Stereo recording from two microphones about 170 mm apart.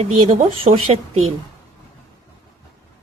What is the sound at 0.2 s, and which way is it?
Speech, 35° right (ahead or behind).